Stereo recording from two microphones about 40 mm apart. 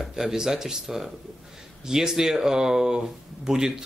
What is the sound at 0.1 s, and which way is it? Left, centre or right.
Speech, centre.